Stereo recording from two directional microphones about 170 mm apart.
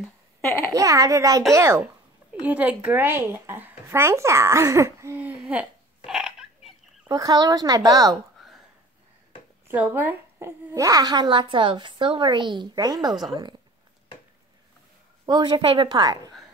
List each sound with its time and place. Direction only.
0.7 s a child's voice: 20° right (ahead or behind)
6.0 s a sound: centre (ahead or behind)
7.1 s a woman's voice: 20° right (ahead or behind)
9.7 s a woman's voice: 10° right (ahead or behind)
15.2 s a woman's voice: 25° right (ahead or behind)